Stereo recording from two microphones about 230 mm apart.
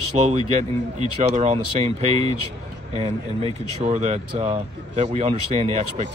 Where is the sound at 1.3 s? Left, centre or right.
Right.